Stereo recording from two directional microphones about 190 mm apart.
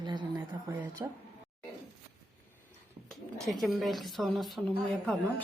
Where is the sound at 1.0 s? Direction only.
15° right (ahead or behind).